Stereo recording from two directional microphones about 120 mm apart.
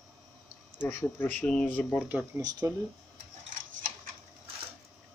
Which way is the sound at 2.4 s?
30° right (ahead or behind).